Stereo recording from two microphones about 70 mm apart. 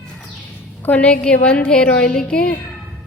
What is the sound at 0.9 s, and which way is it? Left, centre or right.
A woman's voice, left.